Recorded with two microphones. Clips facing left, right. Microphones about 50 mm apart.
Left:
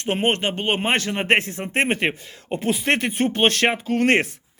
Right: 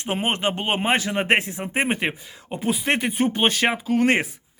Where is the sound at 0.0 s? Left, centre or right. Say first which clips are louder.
Left 2 dB; centre.